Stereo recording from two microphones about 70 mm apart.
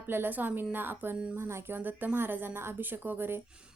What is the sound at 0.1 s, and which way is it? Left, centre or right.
A woman's voice, right.